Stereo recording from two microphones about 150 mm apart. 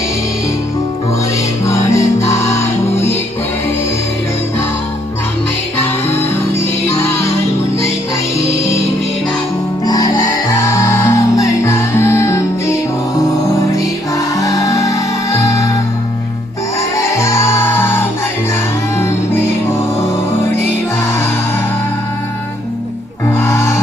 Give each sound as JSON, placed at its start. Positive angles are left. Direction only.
{"t": 1.6, "sound": "music", "side_deg": 20}
{"t": 6.1, "sound": "music", "side_deg": 15}
{"t": 9.8, "sound": "music", "side_deg": 25}
{"t": 17.1, "sound": "music", "side_deg": 20}
{"t": 23.3, "sound": "music", "side_deg": 15}